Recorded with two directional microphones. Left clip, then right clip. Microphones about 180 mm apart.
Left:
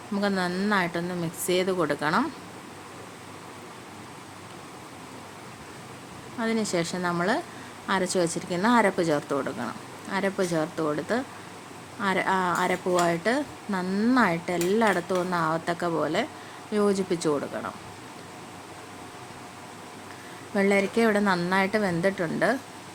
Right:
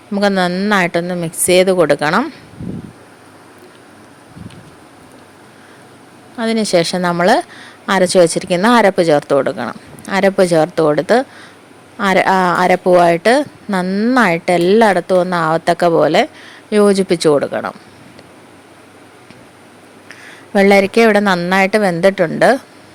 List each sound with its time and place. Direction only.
0.1 s a woman's voice: 45° right (ahead or behind)
6.4 s a woman's voice: 50° right (ahead or behind)
13.8 s a woman's voice: 35° right (ahead or behind)
20.5 s a woman's voice: 50° right (ahead or behind)